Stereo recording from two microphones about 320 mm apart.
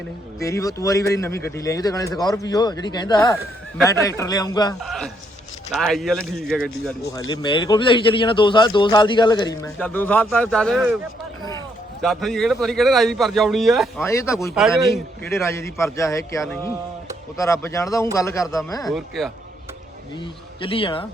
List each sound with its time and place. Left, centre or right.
0.3 s a man's voice: centre
4.8 s a man's voice: centre
7.1 s a man's voice: centre
12.0 s a man's voice: centre
18.9 s a man's voice: centre
20.6 s a man's voice: centre